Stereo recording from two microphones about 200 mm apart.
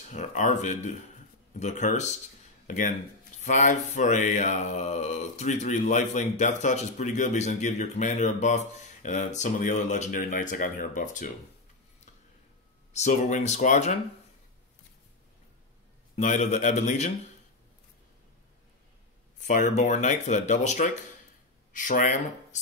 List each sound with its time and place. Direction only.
0.1 s mantra: 35° left (ahead or behind)
2.6 s speech: 40° left (ahead or behind)
3.3 s mantra: 35° left (ahead or behind)
12.9 s mantra: 35° left (ahead or behind)
16.2 s mantra: 35° left (ahead or behind)
19.4 s mantra: 40° left (ahead or behind)
21.7 s speech: 40° left (ahead or behind)